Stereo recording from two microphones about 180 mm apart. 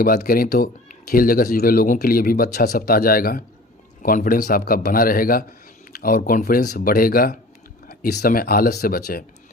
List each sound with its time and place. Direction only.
0.0 s speech: 55° left (ahead or behind)